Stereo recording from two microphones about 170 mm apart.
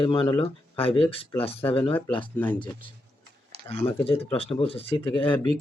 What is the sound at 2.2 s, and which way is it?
Speech, 10° left (ahead or behind).